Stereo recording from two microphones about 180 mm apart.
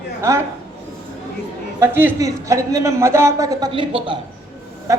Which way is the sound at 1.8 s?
10° right (ahead or behind).